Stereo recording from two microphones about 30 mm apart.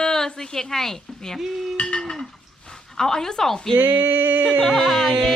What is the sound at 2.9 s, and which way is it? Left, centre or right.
Speech, centre.